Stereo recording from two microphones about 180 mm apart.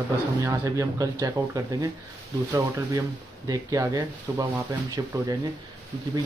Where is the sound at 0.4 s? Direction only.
20° right (ahead or behind).